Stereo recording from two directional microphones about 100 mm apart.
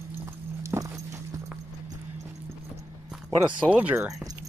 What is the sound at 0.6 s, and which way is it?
Horse, 25° right (ahead or behind).